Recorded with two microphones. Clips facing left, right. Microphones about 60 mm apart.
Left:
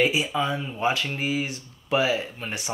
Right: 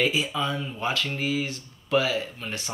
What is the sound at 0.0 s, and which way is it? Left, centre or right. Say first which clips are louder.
Speech: left 2 dB; centre.